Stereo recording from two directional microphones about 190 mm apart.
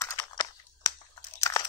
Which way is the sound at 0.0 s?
20° left (ahead or behind).